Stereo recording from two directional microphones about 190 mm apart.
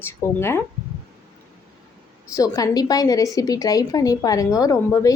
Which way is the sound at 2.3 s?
20° left (ahead or behind).